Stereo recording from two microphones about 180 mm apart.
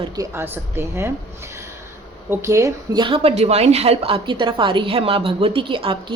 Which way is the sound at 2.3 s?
15° right (ahead or behind).